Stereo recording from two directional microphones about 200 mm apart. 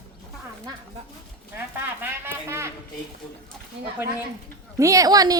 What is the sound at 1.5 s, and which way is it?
Speech, 10° right (ahead or behind).